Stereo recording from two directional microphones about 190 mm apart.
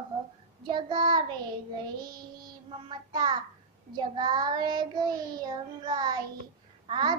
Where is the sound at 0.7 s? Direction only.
25° right (ahead or behind).